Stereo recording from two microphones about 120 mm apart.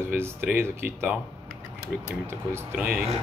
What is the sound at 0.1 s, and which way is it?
Speech, 20° right (ahead or behind).